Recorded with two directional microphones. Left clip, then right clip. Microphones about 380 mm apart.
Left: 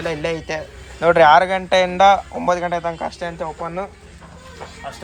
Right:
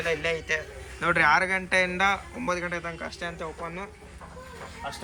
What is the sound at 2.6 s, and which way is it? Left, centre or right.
Speech, left.